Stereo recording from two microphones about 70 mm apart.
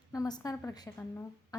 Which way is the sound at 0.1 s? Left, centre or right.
Left.